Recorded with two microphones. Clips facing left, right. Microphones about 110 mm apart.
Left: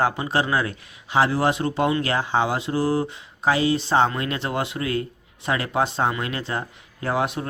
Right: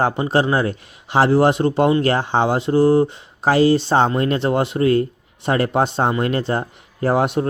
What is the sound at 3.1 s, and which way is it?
Speech, 45° right (ahead or behind).